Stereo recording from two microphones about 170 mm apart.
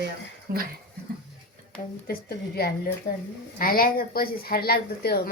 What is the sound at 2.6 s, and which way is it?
Speech, 65° left (ahead or behind).